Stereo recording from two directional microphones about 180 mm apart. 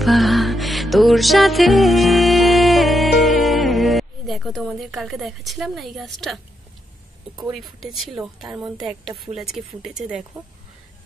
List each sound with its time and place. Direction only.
0.0 s music: centre (ahead or behind)
7.5 s a woman's voice: centre (ahead or behind)